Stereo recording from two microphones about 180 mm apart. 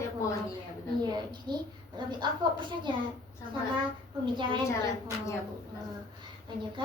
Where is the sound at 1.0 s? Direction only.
25° right (ahead or behind).